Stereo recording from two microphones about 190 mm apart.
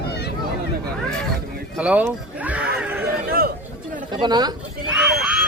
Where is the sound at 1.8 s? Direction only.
5° right (ahead or behind).